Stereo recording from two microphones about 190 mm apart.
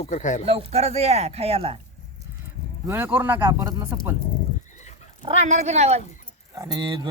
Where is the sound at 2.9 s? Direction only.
10° right (ahead or behind).